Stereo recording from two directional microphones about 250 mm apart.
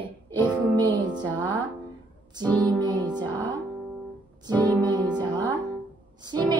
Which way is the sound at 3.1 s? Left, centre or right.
Centre.